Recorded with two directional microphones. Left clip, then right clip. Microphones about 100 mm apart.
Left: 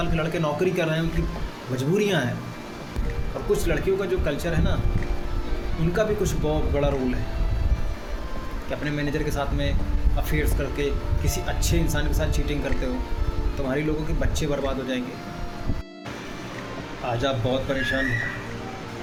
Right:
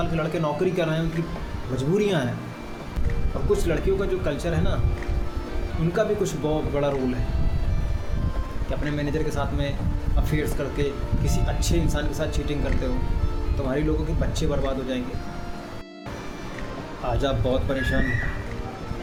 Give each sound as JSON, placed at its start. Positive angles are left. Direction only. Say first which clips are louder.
{"t": 0.0, "sound": "speech", "louder": "even", "side_deg": -5}
{"t": 3.5, "sound": "speech", "louder": "even", "side_deg": -15}
{"t": 5.9, "sound": "speech", "louder": "even", "side_deg": -10}
{"t": 8.8, "sound": "speech", "louder": "even", "side_deg": -10}
{"t": 17.1, "sound": "speech", "louder": "even", "side_deg": -25}